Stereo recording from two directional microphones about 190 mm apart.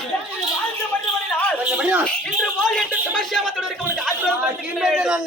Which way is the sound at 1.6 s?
5° right (ahead or behind).